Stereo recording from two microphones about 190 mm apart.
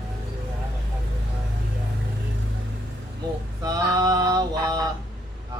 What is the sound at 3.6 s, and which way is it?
Mantra, 20° right (ahead or behind).